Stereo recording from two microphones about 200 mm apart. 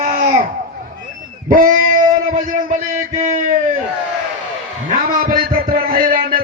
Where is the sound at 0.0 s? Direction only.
45° right (ahead or behind).